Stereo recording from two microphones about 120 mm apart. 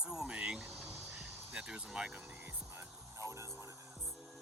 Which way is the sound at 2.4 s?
20° right (ahead or behind).